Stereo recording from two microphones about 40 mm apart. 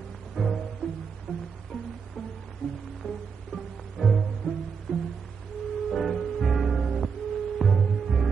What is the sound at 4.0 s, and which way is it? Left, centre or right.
Music, left.